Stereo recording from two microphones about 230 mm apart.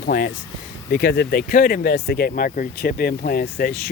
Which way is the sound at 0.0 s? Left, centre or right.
Left.